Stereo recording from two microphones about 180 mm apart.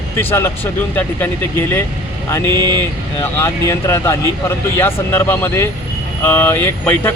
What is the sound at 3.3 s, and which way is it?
A man's voice, 15° left (ahead or behind).